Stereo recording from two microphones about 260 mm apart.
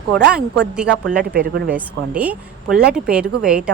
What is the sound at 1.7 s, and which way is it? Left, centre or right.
Speech, centre.